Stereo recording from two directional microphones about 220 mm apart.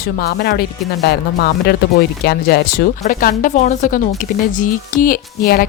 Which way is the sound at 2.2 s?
45° left (ahead or behind).